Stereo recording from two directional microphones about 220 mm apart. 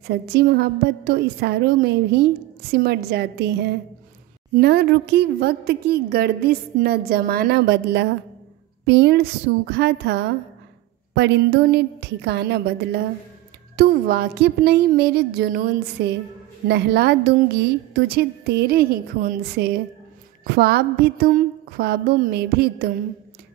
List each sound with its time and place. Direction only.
0.0 s a woman's voice: 45° right (ahead or behind)